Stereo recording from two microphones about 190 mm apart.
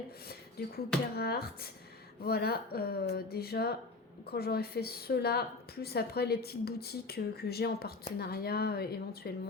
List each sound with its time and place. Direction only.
0.6 s a woman's voice: 55° left (ahead or behind)